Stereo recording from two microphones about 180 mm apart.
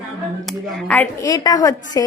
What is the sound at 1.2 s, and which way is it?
Speech, 20° left (ahead or behind).